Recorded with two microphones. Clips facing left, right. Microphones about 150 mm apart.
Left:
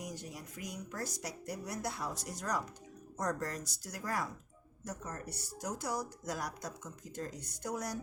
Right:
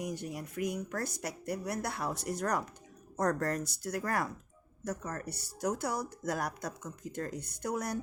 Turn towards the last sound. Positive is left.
turn(degrees=-60)  # may be behind; listen again after turning